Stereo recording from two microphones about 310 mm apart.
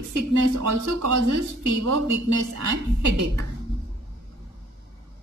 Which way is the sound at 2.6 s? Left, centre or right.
Right.